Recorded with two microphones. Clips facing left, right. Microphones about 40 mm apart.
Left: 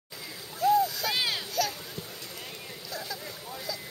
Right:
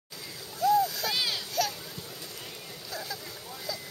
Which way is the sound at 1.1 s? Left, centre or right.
Centre.